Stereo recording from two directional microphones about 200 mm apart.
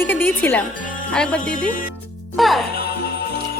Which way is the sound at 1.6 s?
45° left (ahead or behind).